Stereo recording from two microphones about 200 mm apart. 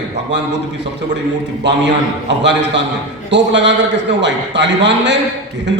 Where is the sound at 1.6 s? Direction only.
60° right (ahead or behind).